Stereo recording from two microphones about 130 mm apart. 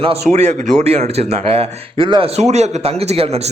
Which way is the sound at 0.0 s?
50° right (ahead or behind).